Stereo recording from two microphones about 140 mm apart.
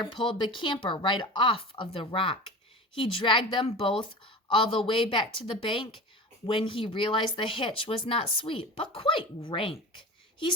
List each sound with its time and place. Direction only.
0.0 s speech: 35° left (ahead or behind)